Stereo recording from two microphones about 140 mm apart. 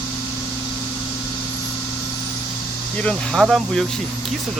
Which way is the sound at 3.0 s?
5° left (ahead or behind).